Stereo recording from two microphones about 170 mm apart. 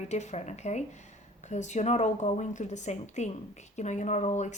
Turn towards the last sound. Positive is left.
turn(degrees=45)  # may be behind; listen again after turning